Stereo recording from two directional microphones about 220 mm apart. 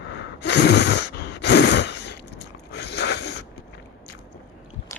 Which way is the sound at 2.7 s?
50° left (ahead or behind).